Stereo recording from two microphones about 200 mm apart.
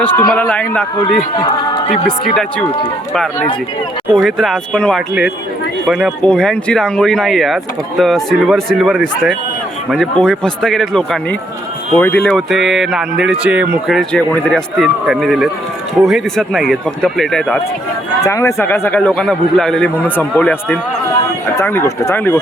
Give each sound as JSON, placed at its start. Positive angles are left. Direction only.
{"t": 0.0, "sound": "a man's voice", "side_deg": 5}
{"t": 1.4, "sound": "speech", "side_deg": 20}
{"t": 2.0, "sound": "speech", "side_deg": 0}
{"t": 4.1, "sound": "speech", "side_deg": 0}
{"t": 18.2, "sound": "a man's voice", "side_deg": 15}